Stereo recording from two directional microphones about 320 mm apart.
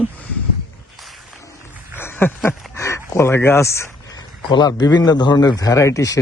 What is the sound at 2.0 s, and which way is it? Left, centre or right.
Speech, centre.